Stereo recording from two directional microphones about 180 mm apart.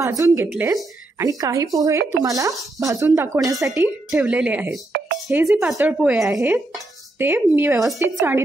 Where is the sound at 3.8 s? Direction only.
5° right (ahead or behind).